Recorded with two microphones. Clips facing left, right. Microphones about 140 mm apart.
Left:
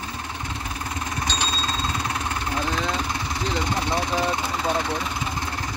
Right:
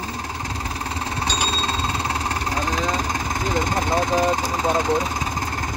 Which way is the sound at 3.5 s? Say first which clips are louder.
Right 4 dB; 45° right (ahead or behind).